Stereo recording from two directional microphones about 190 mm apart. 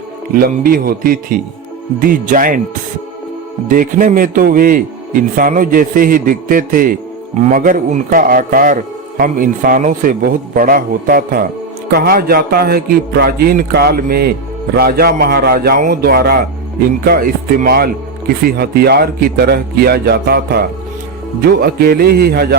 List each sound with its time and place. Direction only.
0.3 s a man's voice: 50° right (ahead or behind)
3.7 s a man's voice: 45° right (ahead or behind)
21.6 s speech: 55° right (ahead or behind)